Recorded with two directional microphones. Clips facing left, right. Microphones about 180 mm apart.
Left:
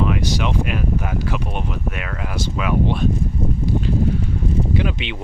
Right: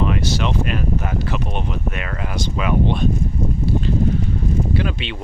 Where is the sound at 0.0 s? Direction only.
15° left (ahead or behind).